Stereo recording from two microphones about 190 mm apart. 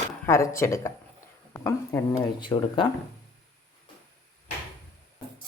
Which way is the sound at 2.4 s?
25° left (ahead or behind).